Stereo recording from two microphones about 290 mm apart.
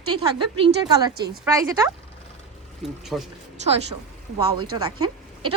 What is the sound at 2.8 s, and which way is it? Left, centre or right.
Speech, centre.